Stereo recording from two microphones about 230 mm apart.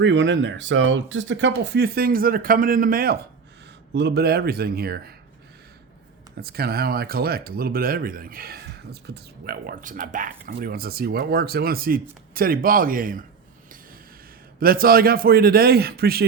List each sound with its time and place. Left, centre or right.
0.0 s speech: right
6.4 s speech: right
14.6 s speech: right